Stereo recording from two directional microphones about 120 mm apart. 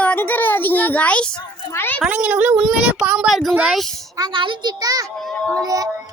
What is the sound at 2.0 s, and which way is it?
A child's voice, 10° right (ahead or behind).